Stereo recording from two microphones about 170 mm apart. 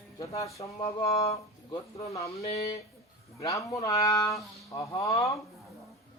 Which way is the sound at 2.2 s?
40° left (ahead or behind).